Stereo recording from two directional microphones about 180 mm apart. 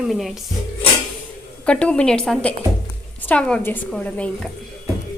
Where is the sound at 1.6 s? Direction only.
5° left (ahead or behind).